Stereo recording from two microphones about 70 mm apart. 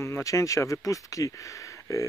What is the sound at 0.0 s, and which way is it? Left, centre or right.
Speech, left.